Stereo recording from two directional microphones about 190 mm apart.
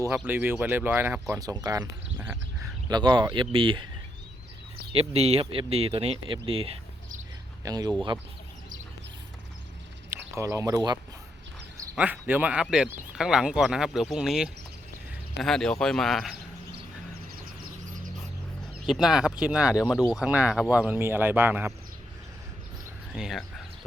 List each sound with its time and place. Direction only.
0.1 s speech: 10° right (ahead or behind)
2.1 s a sound: 10° right (ahead or behind)
2.9 s speech: 25° right (ahead or behind)
4.9 s speech: 30° right (ahead or behind)
10.1 s speech: 15° right (ahead or behind)
11.9 s speech: 5° right (ahead or behind)
18.9 s speech: centre (ahead or behind)
23.1 s speech: centre (ahead or behind)